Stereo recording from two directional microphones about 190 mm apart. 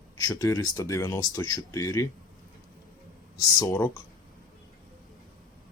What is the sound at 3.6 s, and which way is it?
Speech, 15° left (ahead or behind).